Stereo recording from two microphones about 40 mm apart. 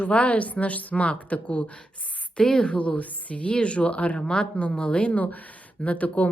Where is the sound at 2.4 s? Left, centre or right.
Centre.